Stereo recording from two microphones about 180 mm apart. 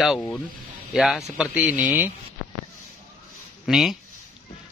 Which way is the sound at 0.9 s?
Centre (ahead or behind).